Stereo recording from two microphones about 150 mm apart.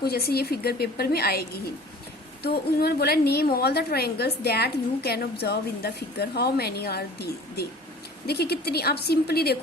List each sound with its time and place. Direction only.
0.0 s a woman's voice: 90° left